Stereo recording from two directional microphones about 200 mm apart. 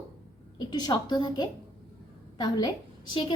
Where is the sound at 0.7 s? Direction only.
20° left (ahead or behind).